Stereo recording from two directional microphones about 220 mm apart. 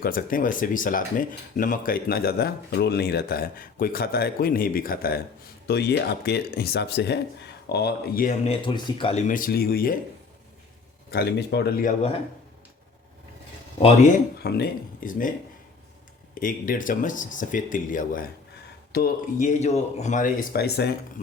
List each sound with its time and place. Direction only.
0.0 s speech: 40° left (ahead or behind)
8.6 s speech: 20° left (ahead or behind); by 10.0 s 40° left (ahead or behind)
11.1 s speech: 45° left (ahead or behind)
14.3 s speech: 45° left (ahead or behind)
16.3 s speech: 40° left (ahead or behind)